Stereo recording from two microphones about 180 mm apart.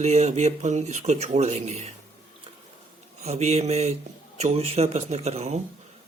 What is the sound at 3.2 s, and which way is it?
Speech, 35° right (ahead or behind).